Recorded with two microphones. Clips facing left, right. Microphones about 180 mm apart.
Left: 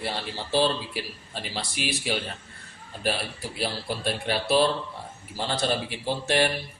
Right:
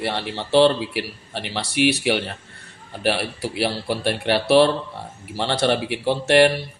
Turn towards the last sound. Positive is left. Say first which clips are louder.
# right 8 dB
turn(degrees=-70)  # may be behind; listen again after turning